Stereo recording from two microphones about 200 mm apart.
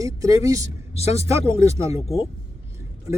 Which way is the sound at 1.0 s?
30° left (ahead or behind).